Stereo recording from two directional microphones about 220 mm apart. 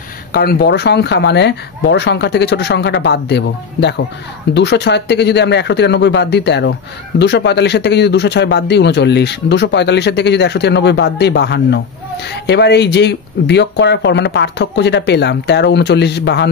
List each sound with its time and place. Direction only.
0.3 s speech: 45° left (ahead or behind)